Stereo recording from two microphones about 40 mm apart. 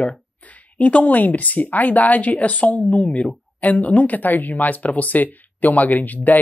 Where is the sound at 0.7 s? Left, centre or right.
Left.